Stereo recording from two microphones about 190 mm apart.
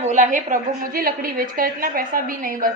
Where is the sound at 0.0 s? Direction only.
40° right (ahead or behind).